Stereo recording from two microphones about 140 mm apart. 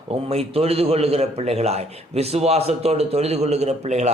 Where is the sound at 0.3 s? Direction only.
45° right (ahead or behind).